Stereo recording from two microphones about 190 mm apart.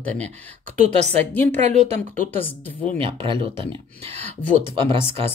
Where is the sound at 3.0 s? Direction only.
25° right (ahead or behind).